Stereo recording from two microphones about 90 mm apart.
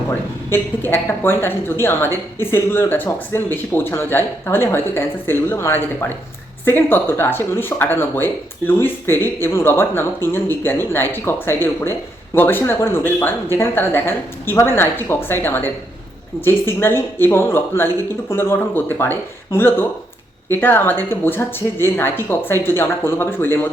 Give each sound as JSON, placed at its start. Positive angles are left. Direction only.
{"t": 0.1, "sound": "speech", "side_deg": 25}